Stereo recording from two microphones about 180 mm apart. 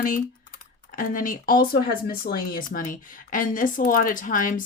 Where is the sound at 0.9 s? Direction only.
50° left (ahead or behind).